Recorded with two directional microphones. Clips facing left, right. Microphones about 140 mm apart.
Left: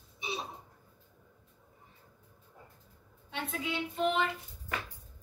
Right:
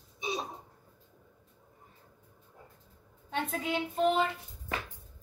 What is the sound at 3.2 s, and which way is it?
Speech, 45° right (ahead or behind).